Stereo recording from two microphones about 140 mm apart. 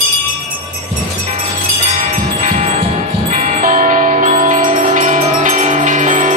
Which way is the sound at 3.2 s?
60° right (ahead or behind).